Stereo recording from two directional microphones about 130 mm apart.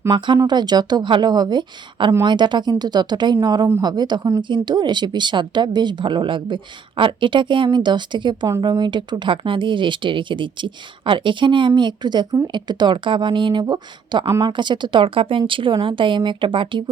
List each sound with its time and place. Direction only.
0.1 s speech: 40° right (ahead or behind)